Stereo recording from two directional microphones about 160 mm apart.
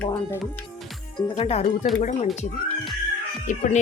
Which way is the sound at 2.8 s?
Centre (ahead or behind).